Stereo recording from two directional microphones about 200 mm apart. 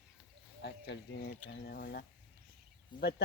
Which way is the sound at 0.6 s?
60° left (ahead or behind).